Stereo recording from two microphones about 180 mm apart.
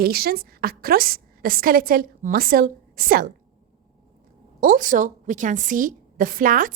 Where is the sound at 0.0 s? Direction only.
60° right (ahead or behind).